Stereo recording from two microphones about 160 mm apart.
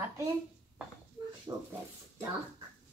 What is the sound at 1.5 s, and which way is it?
Speech, 20° right (ahead or behind).